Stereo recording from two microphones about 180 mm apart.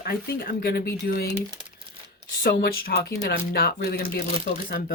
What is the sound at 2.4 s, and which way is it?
Speech, 60° left (ahead or behind).